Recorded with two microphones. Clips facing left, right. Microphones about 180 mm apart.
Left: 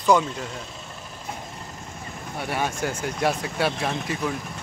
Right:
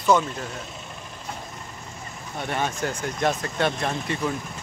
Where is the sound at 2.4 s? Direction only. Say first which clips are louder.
Even; 10° left (ahead or behind).